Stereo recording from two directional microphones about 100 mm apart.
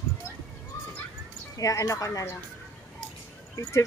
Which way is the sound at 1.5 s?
35° left (ahead or behind).